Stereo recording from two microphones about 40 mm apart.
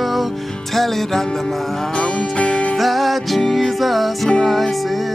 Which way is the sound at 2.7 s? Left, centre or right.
Centre.